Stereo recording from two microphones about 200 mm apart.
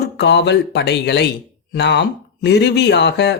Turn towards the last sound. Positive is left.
turn(degrees=55)  # may be behind; listen again after turning